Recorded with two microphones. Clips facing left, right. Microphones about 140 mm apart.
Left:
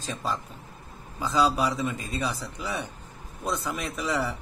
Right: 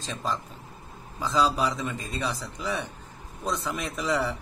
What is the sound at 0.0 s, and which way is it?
A man's voice, 5° left (ahead or behind).